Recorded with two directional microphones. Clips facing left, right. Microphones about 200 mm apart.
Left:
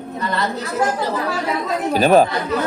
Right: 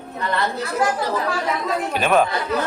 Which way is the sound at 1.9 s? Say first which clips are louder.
Left 6 dB; 35° left (ahead or behind).